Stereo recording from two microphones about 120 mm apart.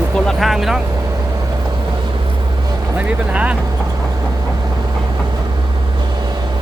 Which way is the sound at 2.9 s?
10° right (ahead or behind).